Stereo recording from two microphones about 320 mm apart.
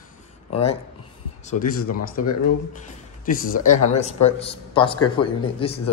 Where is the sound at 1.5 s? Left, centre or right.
Left.